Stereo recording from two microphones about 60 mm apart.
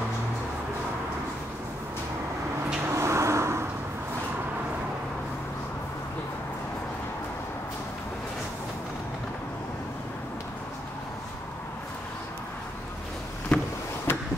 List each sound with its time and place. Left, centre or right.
2.8 s vehicle: right
13.5 s vehicle: centre
14.1 s a sound: left